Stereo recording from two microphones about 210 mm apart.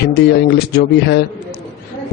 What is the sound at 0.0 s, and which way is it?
A man's voice, 50° left (ahead or behind).